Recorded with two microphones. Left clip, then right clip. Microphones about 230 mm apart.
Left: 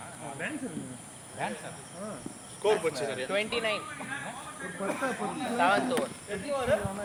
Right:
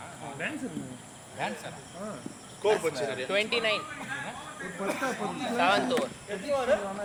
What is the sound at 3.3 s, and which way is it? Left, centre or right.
Speech, right.